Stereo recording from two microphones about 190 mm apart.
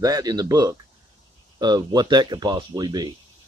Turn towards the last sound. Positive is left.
turn(degrees=-20)  # may be behind; listen again after turning